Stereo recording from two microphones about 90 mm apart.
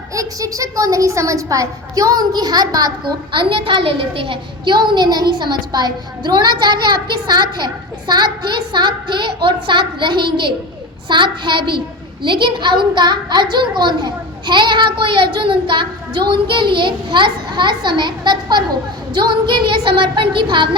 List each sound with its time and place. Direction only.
0.1 s a woman's voice: 40° right (ahead or behind)
3.3 s a woman's voice: 70° right (ahead or behind)